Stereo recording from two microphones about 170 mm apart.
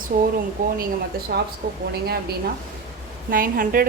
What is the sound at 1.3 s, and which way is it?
Speech, 75° right (ahead or behind).